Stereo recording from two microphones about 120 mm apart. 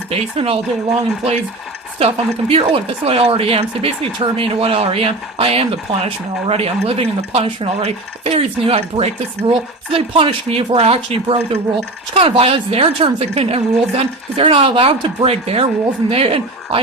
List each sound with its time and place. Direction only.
0.1 s speech: 55° right (ahead or behind)
2.0 s speech: 50° right (ahead or behind)